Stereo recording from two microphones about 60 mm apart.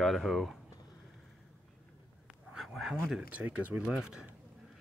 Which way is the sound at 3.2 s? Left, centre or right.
Right.